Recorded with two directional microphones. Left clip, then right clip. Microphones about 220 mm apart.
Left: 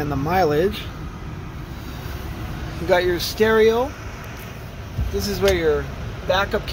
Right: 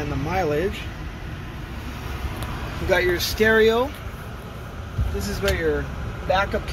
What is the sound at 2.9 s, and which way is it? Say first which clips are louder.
Speech: left 2 dB; 15° left (ahead or behind).